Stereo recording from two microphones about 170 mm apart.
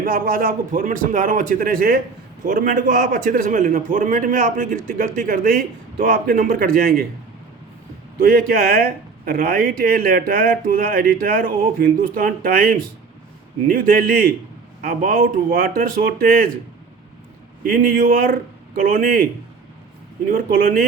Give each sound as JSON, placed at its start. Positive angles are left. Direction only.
{"t": 0.0, "sound": "a man's voice", "side_deg": -55}
{"t": 8.2, "sound": "speech", "side_deg": -60}
{"t": 17.7, "sound": "speech", "side_deg": -55}
{"t": 20.2, "sound": "speech", "side_deg": -55}